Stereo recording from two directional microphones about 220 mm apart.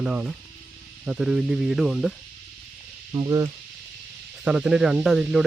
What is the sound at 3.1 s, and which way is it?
Speech, 20° right (ahead or behind).